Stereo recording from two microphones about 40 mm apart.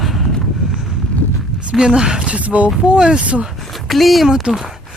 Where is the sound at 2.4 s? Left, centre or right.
Right.